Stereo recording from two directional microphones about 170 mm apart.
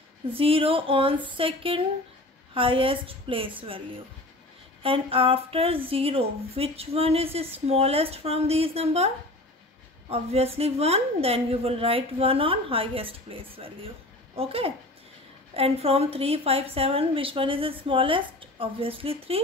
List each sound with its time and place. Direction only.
0.4 s a woman's voice: 35° right (ahead or behind)
4.8 s a woman's voice: 30° right (ahead or behind)